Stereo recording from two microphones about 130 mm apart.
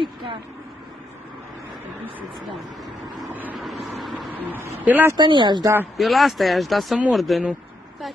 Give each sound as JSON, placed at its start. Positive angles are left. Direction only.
{"t": 0.0, "sound": "speech", "side_deg": -40}
{"t": 3.5, "sound": "speech", "side_deg": 0}
{"t": 4.4, "sound": "a woman's voice", "side_deg": -15}
{"t": 5.1, "sound": "speech", "side_deg": -35}
{"t": 5.9, "sound": "speech", "side_deg": 0}